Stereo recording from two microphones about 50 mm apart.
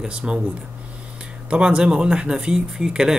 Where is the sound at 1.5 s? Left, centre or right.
Right.